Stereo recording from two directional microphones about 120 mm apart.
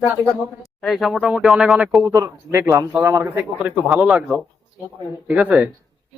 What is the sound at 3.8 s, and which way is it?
Speech, 5° right (ahead or behind).